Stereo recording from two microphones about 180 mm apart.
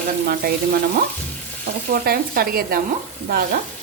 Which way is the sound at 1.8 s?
55° right (ahead or behind).